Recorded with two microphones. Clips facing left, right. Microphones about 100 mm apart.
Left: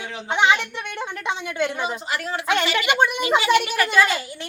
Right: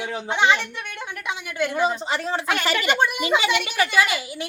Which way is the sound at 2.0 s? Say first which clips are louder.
Right 2 dB; 25° right (ahead or behind).